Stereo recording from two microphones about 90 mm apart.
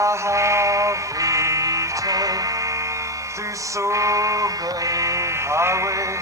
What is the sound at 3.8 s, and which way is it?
Male singing, 35° right (ahead or behind).